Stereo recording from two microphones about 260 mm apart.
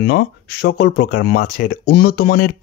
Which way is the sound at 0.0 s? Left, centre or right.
Left.